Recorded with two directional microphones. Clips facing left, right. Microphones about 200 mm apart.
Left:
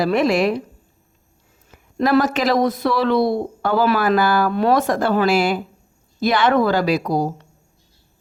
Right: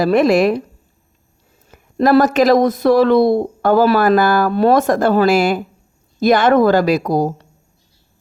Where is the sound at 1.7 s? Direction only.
40° right (ahead or behind).